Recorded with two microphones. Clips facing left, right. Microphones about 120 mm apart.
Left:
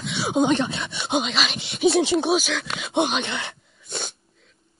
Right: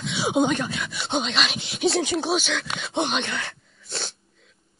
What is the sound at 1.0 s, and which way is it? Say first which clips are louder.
Speech: left 2 dB; centre (ahead or behind).